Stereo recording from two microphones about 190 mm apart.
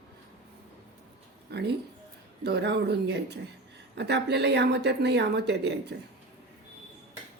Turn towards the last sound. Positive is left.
turn(degrees=-60)  # may be behind; listen again after turning